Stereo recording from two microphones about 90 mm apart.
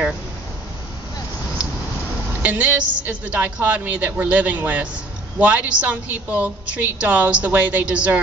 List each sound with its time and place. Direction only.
2.4 s a woman's voice: 15° right (ahead or behind)